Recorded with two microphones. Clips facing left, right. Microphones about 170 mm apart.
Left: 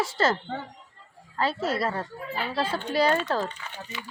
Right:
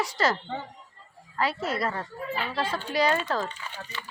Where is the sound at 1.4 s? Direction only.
30° left (ahead or behind).